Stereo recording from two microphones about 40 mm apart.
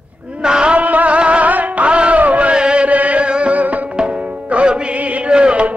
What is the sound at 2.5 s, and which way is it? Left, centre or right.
Music, right.